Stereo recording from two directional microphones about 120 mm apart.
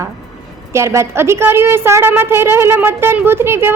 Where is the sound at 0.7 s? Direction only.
25° right (ahead or behind).